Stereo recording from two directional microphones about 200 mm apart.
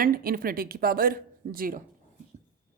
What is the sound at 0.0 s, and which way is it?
Speech, 45° right (ahead or behind).